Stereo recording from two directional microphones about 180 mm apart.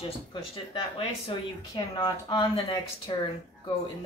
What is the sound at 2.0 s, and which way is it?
Speech, 25° left (ahead or behind).